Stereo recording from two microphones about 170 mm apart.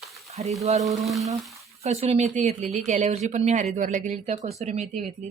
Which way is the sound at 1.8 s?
40° right (ahead or behind).